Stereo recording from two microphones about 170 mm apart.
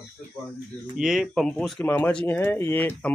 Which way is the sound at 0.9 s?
5° right (ahead or behind).